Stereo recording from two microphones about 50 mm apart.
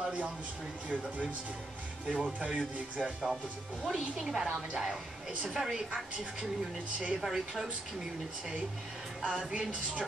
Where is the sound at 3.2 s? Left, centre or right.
Centre.